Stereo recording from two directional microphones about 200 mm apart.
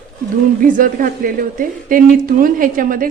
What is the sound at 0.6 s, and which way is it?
A woman's voice, 40° right (ahead or behind).